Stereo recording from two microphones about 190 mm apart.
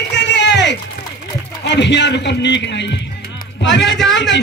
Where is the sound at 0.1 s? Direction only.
65° left (ahead or behind).